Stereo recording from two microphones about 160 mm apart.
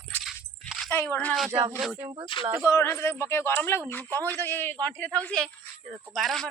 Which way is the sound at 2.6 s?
20° left (ahead or behind).